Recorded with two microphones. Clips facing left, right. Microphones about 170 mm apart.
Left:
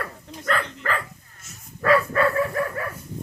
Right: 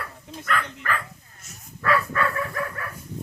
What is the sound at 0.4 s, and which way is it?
Speech, 35° left (ahead or behind).